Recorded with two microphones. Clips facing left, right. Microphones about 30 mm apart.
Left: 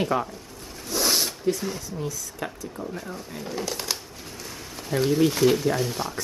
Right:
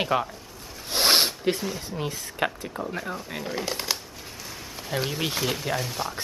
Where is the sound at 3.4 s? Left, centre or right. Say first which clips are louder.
Left 1 dB; right.